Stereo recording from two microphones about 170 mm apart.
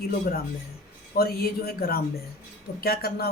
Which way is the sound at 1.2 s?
65° left (ahead or behind).